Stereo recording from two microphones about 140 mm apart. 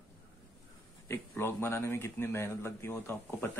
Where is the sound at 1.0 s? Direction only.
15° left (ahead or behind).